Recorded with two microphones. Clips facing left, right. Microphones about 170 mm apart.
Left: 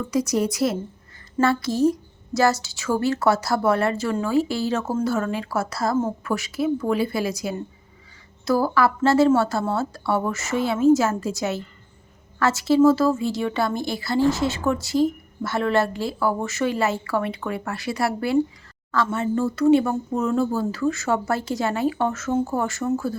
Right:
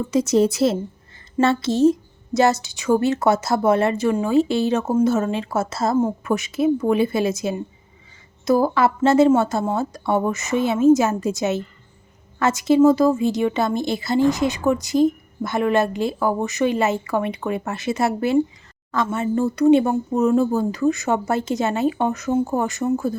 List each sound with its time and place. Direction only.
0.1 s speech: 25° right (ahead or behind)